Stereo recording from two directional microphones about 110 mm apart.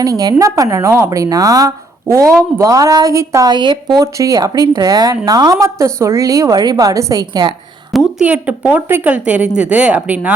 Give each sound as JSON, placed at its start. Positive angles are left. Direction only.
{"t": 0.0, "sound": "speech", "side_deg": -35}
{"t": 3.5, "sound": "speech", "side_deg": -40}
{"t": 7.9, "sound": "a sound", "side_deg": 0}
{"t": 8.2, "sound": "a woman's voice", "side_deg": -10}